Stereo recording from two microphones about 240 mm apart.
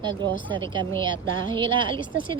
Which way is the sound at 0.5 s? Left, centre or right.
Centre.